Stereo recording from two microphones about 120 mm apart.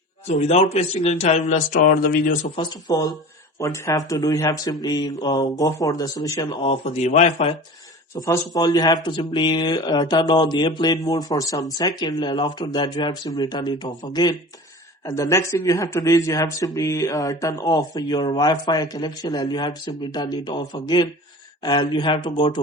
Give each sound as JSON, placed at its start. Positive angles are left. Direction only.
{"t": 0.3, "sound": "speech", "side_deg": 70}
{"t": 2.6, "sound": "speech", "side_deg": 35}
{"t": 6.8, "sound": "speech", "side_deg": 65}
{"t": 8.1, "sound": "speech", "side_deg": 25}